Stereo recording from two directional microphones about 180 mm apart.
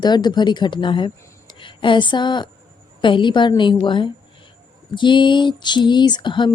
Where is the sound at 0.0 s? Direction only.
25° left (ahead or behind).